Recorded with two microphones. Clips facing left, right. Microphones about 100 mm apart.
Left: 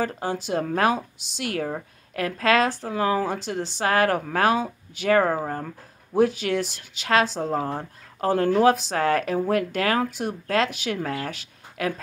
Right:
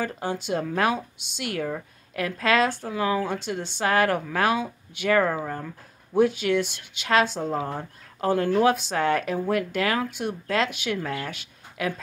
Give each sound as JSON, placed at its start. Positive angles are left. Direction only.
{"t": 0.0, "sound": "speech", "side_deg": 35}